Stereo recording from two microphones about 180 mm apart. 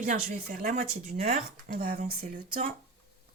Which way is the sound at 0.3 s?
45° right (ahead or behind).